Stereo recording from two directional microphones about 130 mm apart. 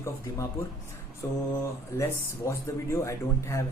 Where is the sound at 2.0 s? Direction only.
20° left (ahead or behind).